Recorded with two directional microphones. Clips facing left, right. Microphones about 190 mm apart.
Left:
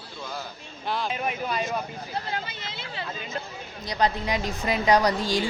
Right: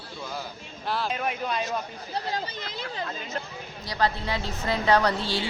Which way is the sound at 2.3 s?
40° right (ahead or behind).